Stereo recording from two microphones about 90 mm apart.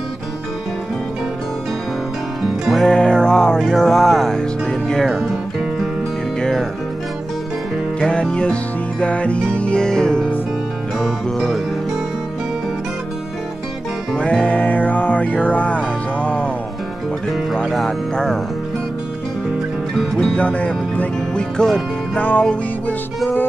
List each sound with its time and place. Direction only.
2.4 s music: centre (ahead or behind)
8.0 s music: 10° left (ahead or behind)
14.1 s music: 15° left (ahead or behind)
17.6 s speech: 5° left (ahead or behind)
20.0 s music: 10° left (ahead or behind)